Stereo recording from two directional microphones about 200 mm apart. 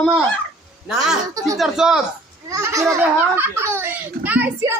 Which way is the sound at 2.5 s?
15° right (ahead or behind).